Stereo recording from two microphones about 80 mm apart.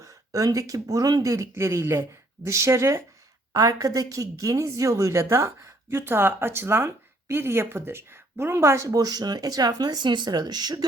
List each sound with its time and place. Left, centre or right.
0.0 s a woman's voice: right
3.5 s a woman's voice: right
8.9 s speech: right